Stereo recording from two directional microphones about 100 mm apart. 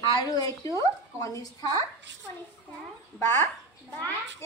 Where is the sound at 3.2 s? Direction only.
25° left (ahead or behind).